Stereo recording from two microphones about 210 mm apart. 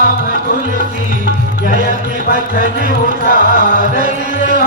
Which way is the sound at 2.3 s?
40° right (ahead or behind).